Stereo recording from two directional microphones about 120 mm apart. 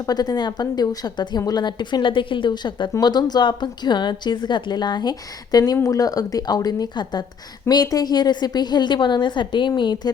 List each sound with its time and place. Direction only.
0.1 s a woman's voice: 35° left (ahead or behind)